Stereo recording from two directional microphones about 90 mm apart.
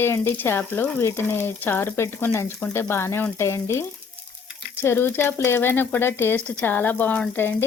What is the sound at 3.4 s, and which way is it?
Frying, 30° left (ahead or behind).